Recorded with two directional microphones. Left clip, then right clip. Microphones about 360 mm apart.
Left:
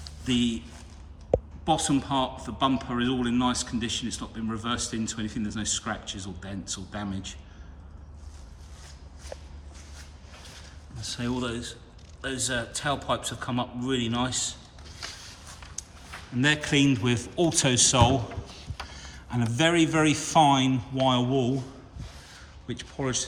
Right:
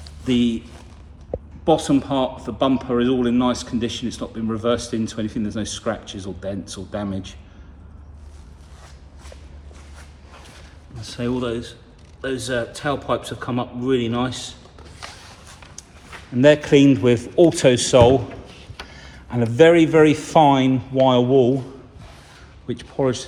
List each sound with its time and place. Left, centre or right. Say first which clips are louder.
0.3 s a man's voice: right 7 dB; centre
1.6 s a man's voice: right 13 dB; centre
11.3 s a man's voice: right 7 dB; centre
15.8 s a sound: left 1 dB; centre
16.4 s speech: right 10 dB; centre
23.0 s speech: right 11 dB; right